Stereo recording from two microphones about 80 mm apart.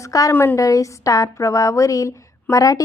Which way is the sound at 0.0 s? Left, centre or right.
Left.